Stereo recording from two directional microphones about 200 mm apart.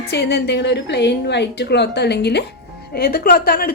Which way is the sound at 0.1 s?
55° left (ahead or behind).